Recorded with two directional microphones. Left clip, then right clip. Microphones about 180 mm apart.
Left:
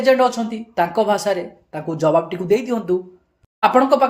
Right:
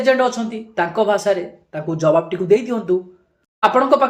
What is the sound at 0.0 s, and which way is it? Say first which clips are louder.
A woman's voice: left 1 dB; 40° left (ahead or behind).